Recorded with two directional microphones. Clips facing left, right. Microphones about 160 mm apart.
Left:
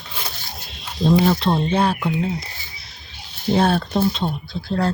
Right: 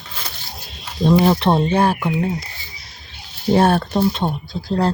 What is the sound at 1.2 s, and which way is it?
Speech, 65° right (ahead or behind).